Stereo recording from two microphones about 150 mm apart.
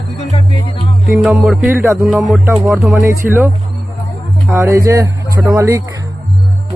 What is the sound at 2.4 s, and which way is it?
Speech, 15° right (ahead or behind).